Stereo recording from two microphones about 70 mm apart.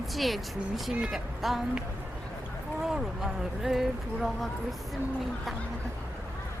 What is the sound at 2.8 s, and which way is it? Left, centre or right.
Speech, centre.